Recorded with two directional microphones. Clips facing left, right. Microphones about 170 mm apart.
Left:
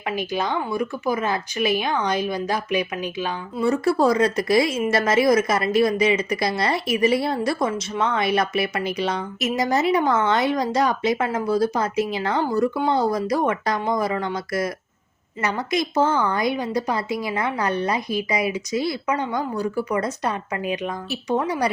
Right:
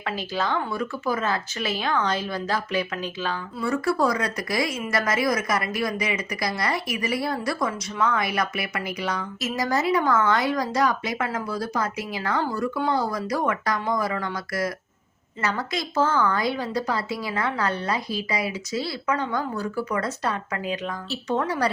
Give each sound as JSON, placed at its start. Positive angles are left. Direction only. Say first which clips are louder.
{"t": 0.0, "sound": "a woman's voice", "louder": "left 3 dB", "side_deg": 15}